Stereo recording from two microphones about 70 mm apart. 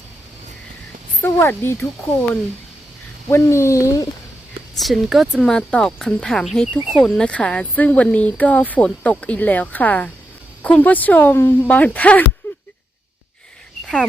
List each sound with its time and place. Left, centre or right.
1.2 s speech: left
3.2 s speech: left
4.8 s speech: centre
7.3 s speech: centre
12.4 s a sound: left
13.8 s speech: centre